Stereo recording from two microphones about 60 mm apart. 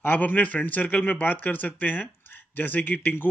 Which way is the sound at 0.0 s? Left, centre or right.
Left.